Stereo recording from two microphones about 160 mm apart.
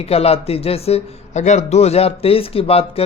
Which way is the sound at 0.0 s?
40° left (ahead or behind).